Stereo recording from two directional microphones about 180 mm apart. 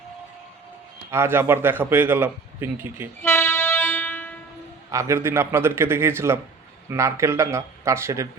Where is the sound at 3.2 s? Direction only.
15° left (ahead or behind).